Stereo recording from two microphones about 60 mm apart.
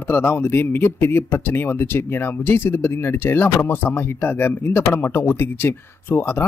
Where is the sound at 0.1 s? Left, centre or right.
Left.